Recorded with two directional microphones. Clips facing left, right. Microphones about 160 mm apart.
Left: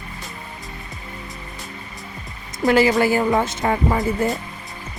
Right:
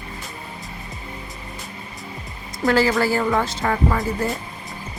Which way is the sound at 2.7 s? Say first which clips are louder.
Left 2 dB; 20° left (ahead or behind).